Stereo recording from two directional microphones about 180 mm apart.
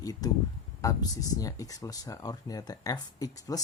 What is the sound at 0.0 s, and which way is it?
Speech, 20° left (ahead or behind).